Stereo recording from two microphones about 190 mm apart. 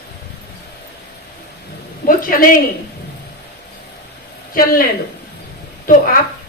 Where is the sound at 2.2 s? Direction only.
45° left (ahead or behind).